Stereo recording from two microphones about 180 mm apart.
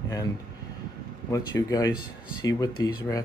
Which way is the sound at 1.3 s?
20° left (ahead or behind).